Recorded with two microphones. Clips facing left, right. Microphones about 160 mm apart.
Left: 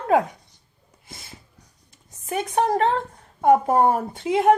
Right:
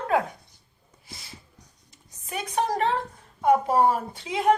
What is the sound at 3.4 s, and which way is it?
A woman's voice, 50° left (ahead or behind).